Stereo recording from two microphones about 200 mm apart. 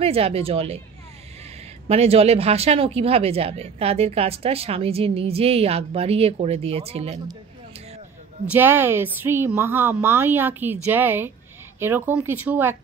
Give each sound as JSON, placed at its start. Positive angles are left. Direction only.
{"t": 0.0, "sound": "a woman's voice", "side_deg": -30}
{"t": 1.9, "sound": "speech", "side_deg": -30}
{"t": 8.5, "sound": "a woman's voice", "side_deg": -10}